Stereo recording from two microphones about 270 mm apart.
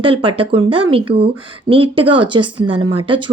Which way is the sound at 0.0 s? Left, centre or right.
Centre.